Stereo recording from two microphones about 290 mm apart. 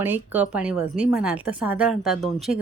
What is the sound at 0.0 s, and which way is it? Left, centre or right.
A woman's voice, centre.